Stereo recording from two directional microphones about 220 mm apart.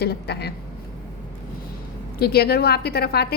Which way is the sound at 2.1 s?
45° left (ahead or behind).